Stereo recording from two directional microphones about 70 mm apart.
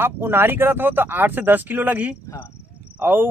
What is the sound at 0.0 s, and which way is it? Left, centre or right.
Speech, right.